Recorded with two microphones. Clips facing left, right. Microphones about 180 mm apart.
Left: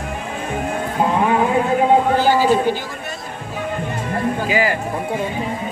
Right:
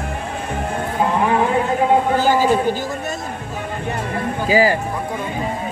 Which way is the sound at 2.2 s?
45° right (ahead or behind).